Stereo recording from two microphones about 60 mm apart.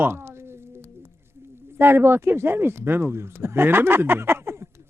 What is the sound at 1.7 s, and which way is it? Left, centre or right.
Speech, right.